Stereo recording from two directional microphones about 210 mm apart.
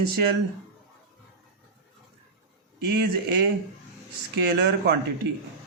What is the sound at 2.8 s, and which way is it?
Speech, 50° right (ahead or behind).